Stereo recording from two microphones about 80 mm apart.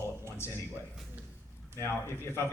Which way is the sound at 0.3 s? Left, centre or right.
Left.